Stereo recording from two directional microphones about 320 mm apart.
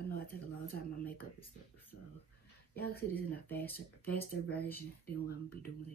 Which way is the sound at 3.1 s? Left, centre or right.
Centre.